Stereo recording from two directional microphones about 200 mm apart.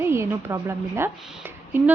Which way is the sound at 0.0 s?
10° right (ahead or behind).